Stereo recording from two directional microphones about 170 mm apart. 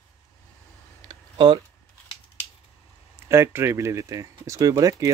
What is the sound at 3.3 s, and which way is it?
Speech, 15° right (ahead or behind).